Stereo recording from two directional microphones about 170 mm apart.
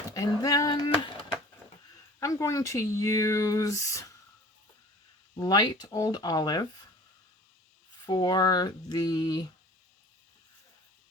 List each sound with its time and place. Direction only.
0.1 s speech: 20° left (ahead or behind)
2.1 s speech: 20° left (ahead or behind)
5.4 s speech: 25° left (ahead or behind)
8.0 s speech: 25° left (ahead or behind)